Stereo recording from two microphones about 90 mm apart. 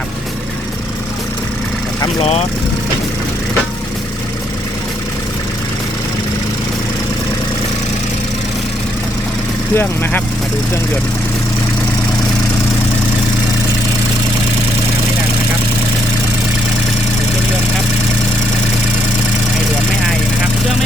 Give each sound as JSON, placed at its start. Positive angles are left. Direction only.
{"t": 9.7, "sound": "speech", "side_deg": 20}